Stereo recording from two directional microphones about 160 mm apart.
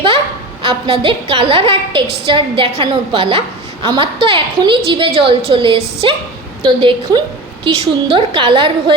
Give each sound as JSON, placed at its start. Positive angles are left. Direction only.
{"t": 0.6, "sound": "a woman's voice", "side_deg": -30}